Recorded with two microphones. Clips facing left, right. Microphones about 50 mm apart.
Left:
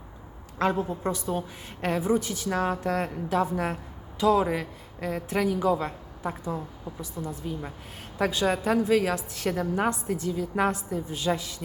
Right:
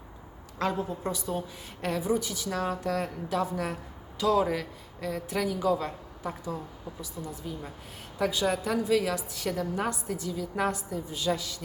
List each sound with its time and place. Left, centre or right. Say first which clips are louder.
0.6 s a woman's voice: left 4 dB; left
4.9 s a woman's voice: left 3 dB; left